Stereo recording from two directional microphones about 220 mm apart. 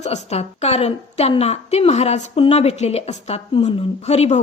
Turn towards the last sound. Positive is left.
turn(degrees=30)  # may be behind; listen again after turning